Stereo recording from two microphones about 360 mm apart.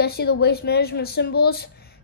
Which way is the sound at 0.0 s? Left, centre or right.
Left.